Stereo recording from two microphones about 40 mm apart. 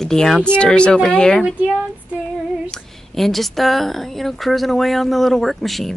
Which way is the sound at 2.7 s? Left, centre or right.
Centre.